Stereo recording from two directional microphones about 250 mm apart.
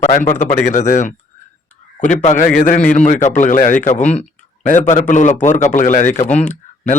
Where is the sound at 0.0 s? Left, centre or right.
Left.